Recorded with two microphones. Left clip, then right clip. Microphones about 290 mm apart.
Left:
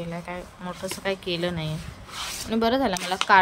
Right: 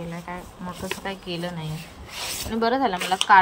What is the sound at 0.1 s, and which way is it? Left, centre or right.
A woman's voice, left.